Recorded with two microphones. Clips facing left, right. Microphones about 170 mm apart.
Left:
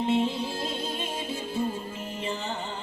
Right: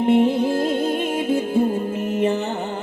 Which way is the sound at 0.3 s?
55° right (ahead or behind).